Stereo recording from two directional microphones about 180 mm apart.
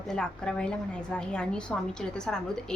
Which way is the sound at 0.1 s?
5° left (ahead or behind).